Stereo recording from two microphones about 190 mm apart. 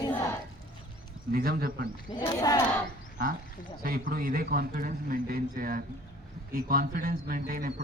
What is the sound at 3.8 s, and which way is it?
A man's voice, 50° right (ahead or behind).